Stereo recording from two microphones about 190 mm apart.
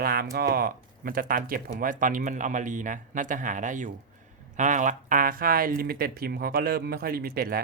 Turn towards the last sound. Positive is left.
turn(degrees=-50)  # may be behind; listen again after turning